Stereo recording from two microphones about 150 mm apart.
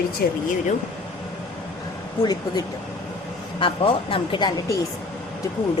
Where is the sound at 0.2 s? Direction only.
90° left.